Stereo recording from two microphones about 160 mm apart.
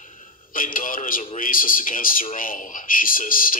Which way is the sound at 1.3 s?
60° left (ahead or behind).